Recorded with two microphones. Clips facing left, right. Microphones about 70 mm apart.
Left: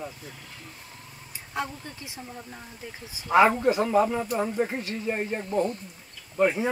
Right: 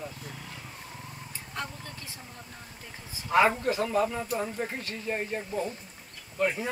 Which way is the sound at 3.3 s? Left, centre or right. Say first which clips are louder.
Left 4 dB; centre.